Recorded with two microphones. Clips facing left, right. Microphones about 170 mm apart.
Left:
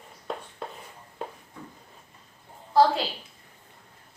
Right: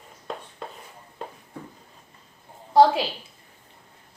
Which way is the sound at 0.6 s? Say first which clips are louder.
Left 1 dB; centre (ahead or behind).